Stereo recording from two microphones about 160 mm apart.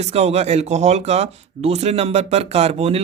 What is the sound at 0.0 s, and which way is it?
A man's voice, 40° right (ahead or behind).